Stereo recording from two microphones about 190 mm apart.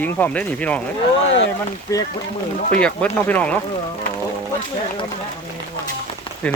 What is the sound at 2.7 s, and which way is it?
Speech, 5° left (ahead or behind).